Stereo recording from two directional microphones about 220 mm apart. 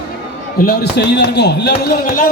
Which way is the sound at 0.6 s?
45° left (ahead or behind).